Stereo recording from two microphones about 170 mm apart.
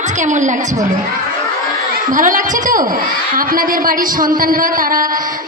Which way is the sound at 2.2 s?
50° right (ahead or behind).